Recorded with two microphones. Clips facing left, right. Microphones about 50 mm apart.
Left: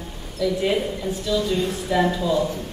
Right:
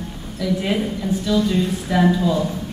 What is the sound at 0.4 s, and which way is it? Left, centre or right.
Speech, centre.